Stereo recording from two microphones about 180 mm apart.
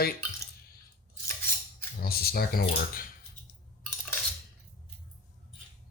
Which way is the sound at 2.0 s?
60° left (ahead or behind).